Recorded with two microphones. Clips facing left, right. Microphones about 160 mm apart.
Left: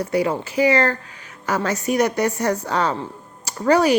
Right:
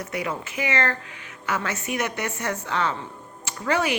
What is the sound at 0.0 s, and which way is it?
Speech, 35° left (ahead or behind).